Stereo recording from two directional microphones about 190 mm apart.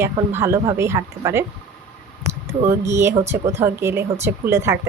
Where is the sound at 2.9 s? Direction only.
15° right (ahead or behind).